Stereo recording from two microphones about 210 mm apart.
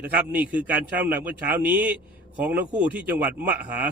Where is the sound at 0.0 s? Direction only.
5° right (ahead or behind).